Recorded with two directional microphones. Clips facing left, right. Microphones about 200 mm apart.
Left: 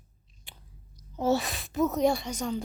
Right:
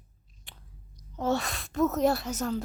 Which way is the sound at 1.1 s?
5° left (ahead or behind).